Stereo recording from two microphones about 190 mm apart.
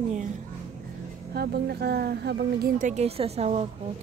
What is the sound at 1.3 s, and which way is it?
Speech, 55° right (ahead or behind).